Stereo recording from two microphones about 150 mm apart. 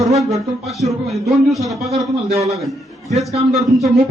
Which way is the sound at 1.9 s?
45° right (ahead or behind).